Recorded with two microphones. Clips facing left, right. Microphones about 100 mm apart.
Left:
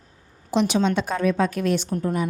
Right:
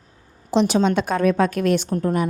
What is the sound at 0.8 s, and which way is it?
A woman's voice, 55° right (ahead or behind).